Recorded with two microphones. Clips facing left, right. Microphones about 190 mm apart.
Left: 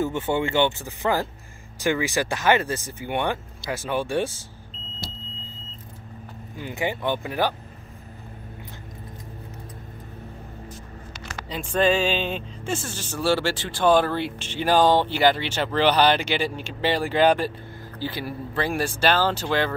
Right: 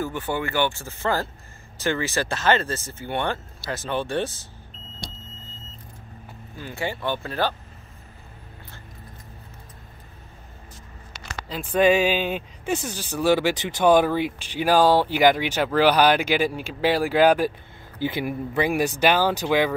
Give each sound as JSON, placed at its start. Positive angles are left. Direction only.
{"t": 0.0, "sound": "speech", "side_deg": 25}
{"t": 6.5, "sound": "speech", "side_deg": 15}
{"t": 11.4, "sound": "music", "side_deg": 0}
{"t": 11.8, "sound": "speech", "side_deg": -15}